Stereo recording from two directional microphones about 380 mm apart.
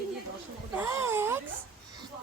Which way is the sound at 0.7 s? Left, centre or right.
Centre.